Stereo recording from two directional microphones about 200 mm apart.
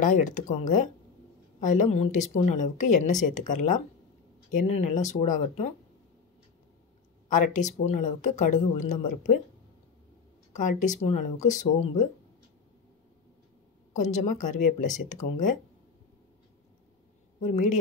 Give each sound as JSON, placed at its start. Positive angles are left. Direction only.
{"t": 0.0, "sound": "speech", "side_deg": 40}
{"t": 7.2, "sound": "speech", "side_deg": 40}
{"t": 10.5, "sound": "speech", "side_deg": 40}
{"t": 13.9, "sound": "speech", "side_deg": 35}